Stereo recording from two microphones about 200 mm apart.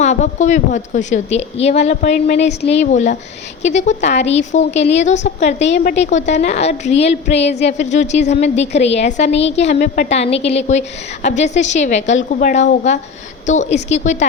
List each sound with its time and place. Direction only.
0.0 s a woman's voice: 35° left (ahead or behind)